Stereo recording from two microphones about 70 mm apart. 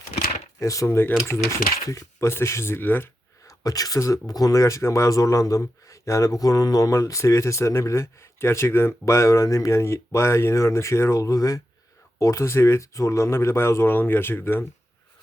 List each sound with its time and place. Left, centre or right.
0.6 s speech: left
3.4 s speech: left